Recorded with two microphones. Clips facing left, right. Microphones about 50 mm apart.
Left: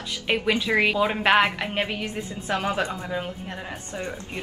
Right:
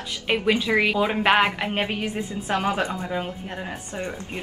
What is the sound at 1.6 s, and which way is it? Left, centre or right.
A woman's voice, centre.